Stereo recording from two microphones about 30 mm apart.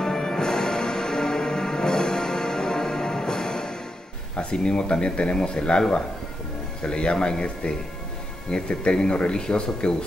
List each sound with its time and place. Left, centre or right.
0.0 s music: centre
4.4 s speech: left
8.5 s speech: left